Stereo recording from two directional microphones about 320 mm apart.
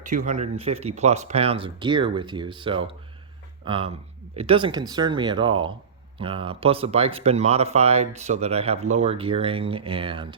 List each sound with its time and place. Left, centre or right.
0.3 s speech: right